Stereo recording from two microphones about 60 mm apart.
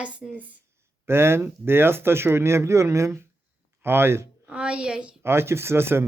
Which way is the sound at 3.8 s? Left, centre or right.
Right.